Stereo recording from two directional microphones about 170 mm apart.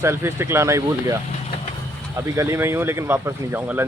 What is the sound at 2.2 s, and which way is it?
Speech, 15° right (ahead or behind).